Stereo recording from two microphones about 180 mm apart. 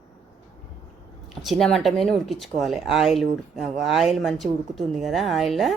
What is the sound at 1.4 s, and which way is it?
Speech, centre (ahead or behind).